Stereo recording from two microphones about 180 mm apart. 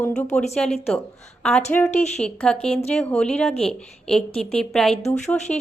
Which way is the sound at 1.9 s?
35° left (ahead or behind).